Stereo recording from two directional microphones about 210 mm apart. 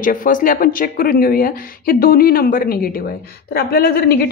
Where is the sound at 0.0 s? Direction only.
40° left (ahead or behind).